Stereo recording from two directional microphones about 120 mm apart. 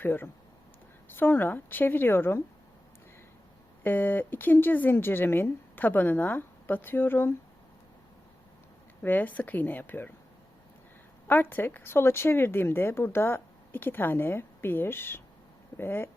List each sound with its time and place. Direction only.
0.0 s speech: 15° left (ahead or behind)
3.8 s speech: 15° left (ahead or behind)
9.0 s speech: 15° left (ahead or behind)
11.3 s speech: 15° left (ahead or behind)